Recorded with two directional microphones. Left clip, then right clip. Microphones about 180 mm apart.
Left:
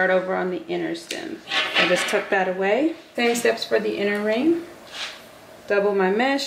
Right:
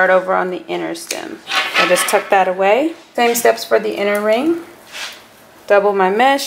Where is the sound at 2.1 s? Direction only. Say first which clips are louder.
Right 8 dB; 20° left (ahead or behind).